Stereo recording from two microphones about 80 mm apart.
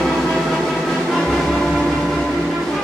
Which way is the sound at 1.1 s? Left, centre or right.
Centre.